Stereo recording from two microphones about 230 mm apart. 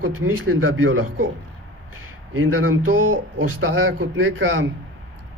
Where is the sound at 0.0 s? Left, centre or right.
Right.